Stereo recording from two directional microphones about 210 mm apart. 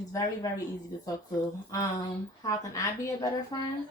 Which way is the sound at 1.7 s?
15° left (ahead or behind).